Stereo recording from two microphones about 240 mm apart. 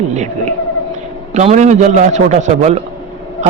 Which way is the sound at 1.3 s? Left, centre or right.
Right.